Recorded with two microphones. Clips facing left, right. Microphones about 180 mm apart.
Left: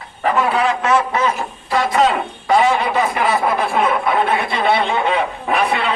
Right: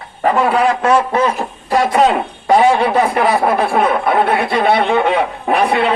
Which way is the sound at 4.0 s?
50° right (ahead or behind).